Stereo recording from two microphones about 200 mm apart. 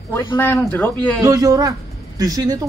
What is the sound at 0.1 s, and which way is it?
Speech, 10° left (ahead or behind).